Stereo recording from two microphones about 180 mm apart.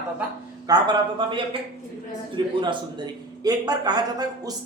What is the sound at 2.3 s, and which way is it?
A man's voice, 25° right (ahead or behind).